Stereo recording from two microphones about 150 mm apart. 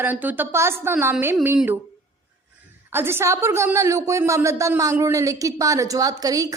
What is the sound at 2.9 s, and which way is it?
A woman's voice, 15° right (ahead or behind).